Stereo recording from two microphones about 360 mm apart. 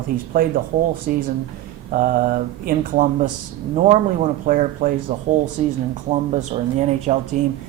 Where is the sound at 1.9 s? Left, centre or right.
Right.